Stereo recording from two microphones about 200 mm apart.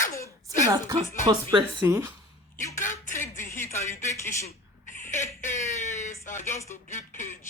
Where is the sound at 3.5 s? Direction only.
15° left (ahead or behind).